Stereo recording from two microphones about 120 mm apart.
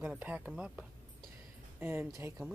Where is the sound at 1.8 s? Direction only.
20° right (ahead or behind).